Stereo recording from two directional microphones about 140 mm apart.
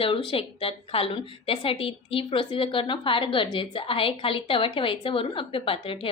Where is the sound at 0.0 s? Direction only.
40° left (ahead or behind).